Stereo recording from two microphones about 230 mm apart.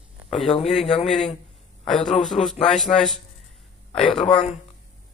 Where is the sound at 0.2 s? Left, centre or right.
Centre.